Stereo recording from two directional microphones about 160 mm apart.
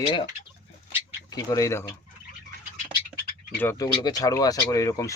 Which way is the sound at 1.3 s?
20° left (ahead or behind).